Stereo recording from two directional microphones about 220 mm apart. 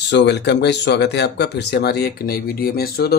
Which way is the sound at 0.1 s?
50° left (ahead or behind).